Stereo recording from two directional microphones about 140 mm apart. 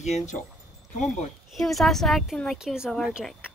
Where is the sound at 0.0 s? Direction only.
55° left (ahead or behind).